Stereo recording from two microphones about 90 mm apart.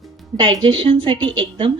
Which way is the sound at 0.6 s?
65° right (ahead or behind).